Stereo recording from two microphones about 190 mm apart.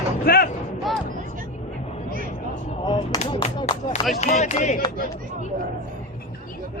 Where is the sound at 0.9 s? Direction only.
Centre (ahead or behind).